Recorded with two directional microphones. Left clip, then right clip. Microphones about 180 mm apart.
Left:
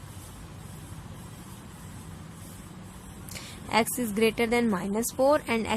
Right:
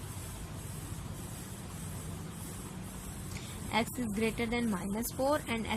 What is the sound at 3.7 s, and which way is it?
Speech, 40° left (ahead or behind).